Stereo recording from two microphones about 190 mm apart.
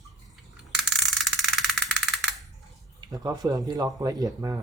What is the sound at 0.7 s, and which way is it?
Rattle, centre (ahead or behind).